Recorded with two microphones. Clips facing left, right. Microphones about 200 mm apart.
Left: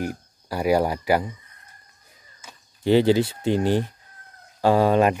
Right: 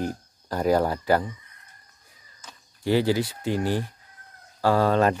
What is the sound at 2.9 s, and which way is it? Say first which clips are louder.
Speech: left 5 dB; 25° left (ahead or behind).